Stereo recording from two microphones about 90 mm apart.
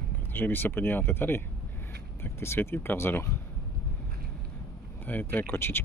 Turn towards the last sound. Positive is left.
turn(degrees=25)  # may be behind; listen again after turning